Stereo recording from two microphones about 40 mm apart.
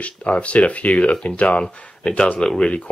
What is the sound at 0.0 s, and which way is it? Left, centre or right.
Speech, left.